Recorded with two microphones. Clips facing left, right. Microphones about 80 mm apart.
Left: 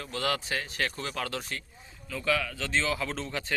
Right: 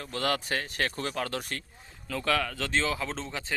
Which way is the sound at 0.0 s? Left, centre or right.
Right.